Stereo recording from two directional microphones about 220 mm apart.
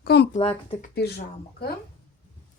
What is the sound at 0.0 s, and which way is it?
Speech, 45° left (ahead or behind).